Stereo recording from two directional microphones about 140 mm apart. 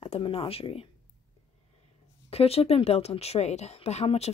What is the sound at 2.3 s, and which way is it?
Speech, 45° left (ahead or behind).